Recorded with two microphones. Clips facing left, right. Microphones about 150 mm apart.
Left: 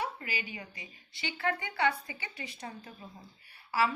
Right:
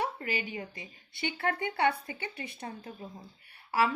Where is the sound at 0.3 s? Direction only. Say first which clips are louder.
Right 5 dB; 50° right (ahead or behind).